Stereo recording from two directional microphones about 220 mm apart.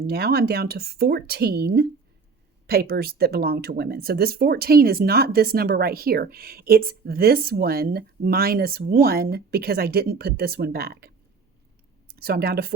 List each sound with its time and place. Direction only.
0.0 s speech: 45° right (ahead or behind)
12.1 s speech: 45° right (ahead or behind)